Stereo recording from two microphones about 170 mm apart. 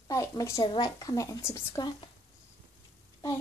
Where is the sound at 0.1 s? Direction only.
20° left (ahead or behind).